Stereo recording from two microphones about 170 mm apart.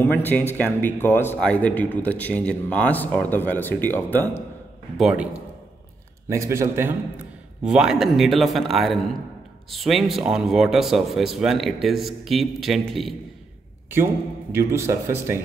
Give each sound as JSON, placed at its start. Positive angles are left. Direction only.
{"t": 0.0, "sound": "speech", "side_deg": 10}
{"t": 4.9, "sound": "speech", "side_deg": -5}
{"t": 6.2, "sound": "speech", "side_deg": -15}
{"t": 14.5, "sound": "speech", "side_deg": -15}